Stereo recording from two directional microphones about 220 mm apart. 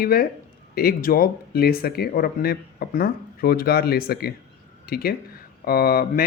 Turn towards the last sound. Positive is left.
turn(degrees=45)  # may be behind; listen again after turning